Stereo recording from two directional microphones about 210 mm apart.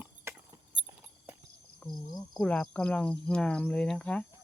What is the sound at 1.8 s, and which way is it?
Cricket, 5° left (ahead or behind).